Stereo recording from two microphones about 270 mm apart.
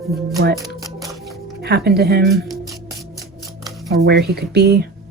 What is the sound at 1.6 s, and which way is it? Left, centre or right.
Speech, right.